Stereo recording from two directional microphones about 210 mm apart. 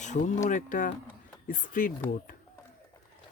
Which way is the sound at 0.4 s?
40° left (ahead or behind).